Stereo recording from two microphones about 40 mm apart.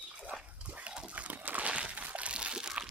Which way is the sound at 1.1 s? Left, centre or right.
Right.